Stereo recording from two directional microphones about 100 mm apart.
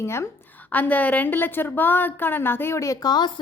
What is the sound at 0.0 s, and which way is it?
Speech, 25° left (ahead or behind).